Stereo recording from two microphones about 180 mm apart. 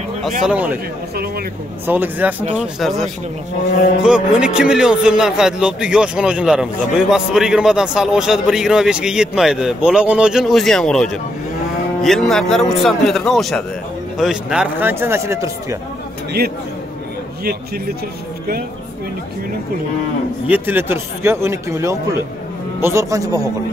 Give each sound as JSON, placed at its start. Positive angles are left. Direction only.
{"t": 0.4, "sound": "a man's voice", "side_deg": -5}
{"t": 1.9, "sound": "a man's voice", "side_deg": -10}
{"t": 4.0, "sound": "a man's voice", "side_deg": -5}
{"t": 20.4, "sound": "a man's voice", "side_deg": -10}